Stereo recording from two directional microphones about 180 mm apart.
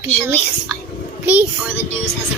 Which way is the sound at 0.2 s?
10° right (ahead or behind).